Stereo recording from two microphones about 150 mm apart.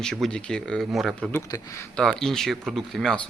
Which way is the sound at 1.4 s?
20° left (ahead or behind).